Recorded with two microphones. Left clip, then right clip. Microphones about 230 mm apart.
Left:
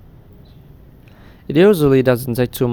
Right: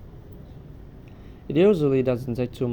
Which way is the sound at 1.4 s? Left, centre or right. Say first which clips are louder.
Left 7 dB; left.